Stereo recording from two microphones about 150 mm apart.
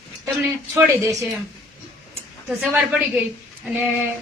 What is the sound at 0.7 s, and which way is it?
Speech, 15° right (ahead or behind).